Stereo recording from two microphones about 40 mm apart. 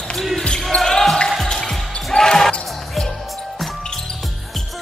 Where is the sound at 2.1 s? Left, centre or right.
Centre.